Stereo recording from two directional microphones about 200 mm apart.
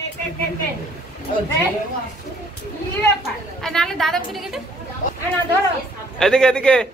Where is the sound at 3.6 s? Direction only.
Centre (ahead or behind).